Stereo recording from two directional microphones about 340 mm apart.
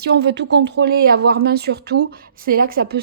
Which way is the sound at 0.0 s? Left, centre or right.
Right.